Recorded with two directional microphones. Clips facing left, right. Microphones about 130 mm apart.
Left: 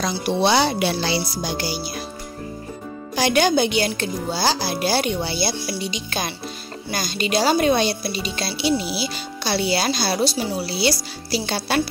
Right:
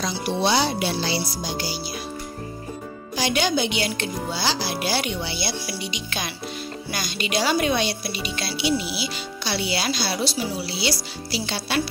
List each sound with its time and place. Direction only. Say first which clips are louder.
0.0 s speech: left 3 dB; 65° left (ahead or behind)
3.2 s speech: left 5 dB; 50° left (ahead or behind)